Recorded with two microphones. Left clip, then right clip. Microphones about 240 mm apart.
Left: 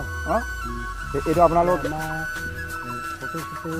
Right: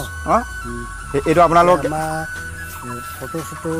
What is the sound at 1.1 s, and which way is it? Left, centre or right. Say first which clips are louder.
Speech: right 5 dB; right.